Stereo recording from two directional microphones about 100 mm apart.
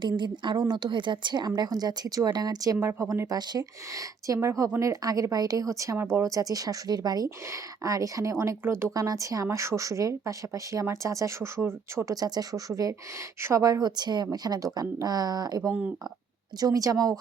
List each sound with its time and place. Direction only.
0.0 s a woman's voice: 50° right (ahead or behind); by 8.9 s 25° right (ahead or behind)
8.9 s a woman's voice: 35° right (ahead or behind)
12.1 s a woman's voice: 40° right (ahead or behind)